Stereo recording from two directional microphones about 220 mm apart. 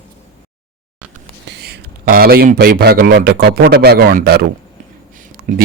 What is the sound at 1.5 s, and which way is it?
Speech, 50° right (ahead or behind).